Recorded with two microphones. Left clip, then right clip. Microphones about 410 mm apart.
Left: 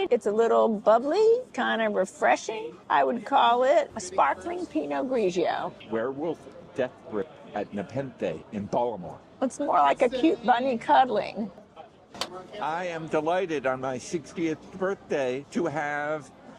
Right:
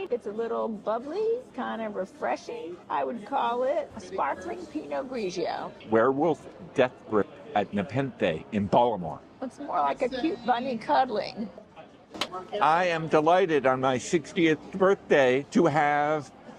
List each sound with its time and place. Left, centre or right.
0.0 s a woman's voice: left
5.9 s a man's voice: right
9.4 s a woman's voice: left
12.5 s a man's voice: right